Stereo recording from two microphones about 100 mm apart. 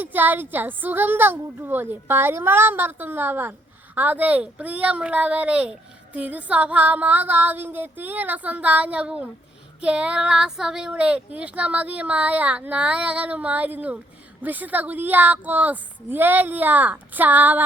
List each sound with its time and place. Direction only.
0.0 s a woman's voice: 20° right (ahead or behind)